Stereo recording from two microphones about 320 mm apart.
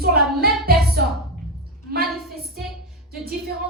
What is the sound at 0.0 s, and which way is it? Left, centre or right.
Child singing, right.